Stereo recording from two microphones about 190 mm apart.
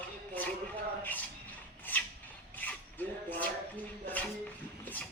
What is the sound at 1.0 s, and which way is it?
Rub, 10° left (ahead or behind).